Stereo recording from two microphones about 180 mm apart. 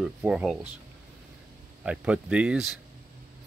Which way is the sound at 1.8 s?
5° right (ahead or behind).